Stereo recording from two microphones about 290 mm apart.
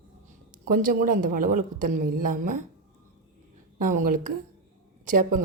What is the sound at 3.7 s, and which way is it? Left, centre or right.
A woman's voice, right.